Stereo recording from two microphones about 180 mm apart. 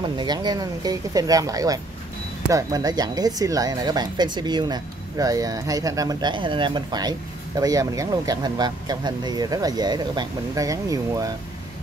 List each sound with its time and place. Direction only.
0.0 s speech: 25° right (ahead or behind)